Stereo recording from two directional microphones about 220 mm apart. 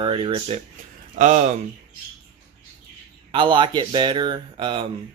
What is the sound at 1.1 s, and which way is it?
Speech, 35° right (ahead or behind).